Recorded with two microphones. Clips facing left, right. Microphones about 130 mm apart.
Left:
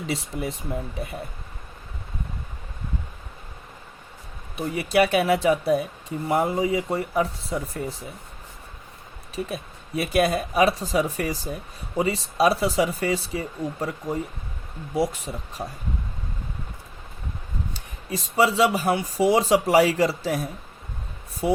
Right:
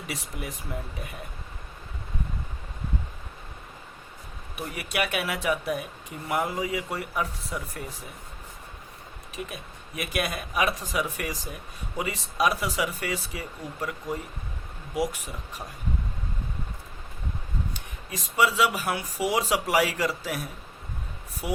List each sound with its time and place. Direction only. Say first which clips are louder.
0.1 s speech: left 7 dB; 30° left (ahead or behind)
4.5 s speech: left 9 dB; 30° left (ahead or behind)
9.3 s speech: left 7 dB; 35° left (ahead or behind)
17.7 s speech: left 6 dB; 35° left (ahead or behind)